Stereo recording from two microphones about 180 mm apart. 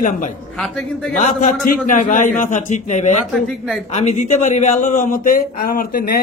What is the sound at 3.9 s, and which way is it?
A man's voice, 40° left (ahead or behind).